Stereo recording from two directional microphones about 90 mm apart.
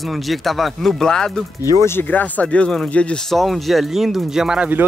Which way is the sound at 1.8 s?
25° left (ahead or behind).